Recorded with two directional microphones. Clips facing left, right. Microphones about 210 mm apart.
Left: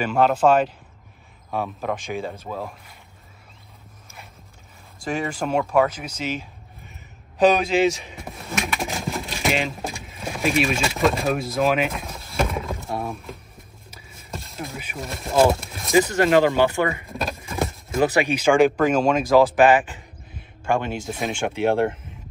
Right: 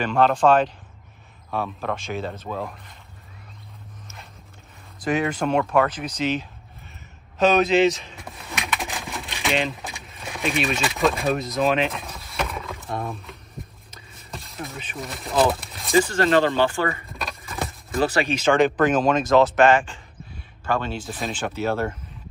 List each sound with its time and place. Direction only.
0.0 s speech: 10° left (ahead or behind)
5.0 s speech: centre (ahead or behind)
7.5 s speech: centre (ahead or behind)
8.2 s a sound: centre (ahead or behind)
9.4 s speech: centre (ahead or behind)
9.8 s vehicle: centre (ahead or behind)
10.3 s speech: centre (ahead or behind)
12.8 s a sound: centre (ahead or behind)
15.0 s speech: centre (ahead or behind)
15.5 s a sound: centre (ahead or behind)
15.9 s speech: 15° left (ahead or behind)
17.9 s speech: 15° left (ahead or behind)
18.8 s speech: centre (ahead or behind)
19.2 s speech: 10° left (ahead or behind)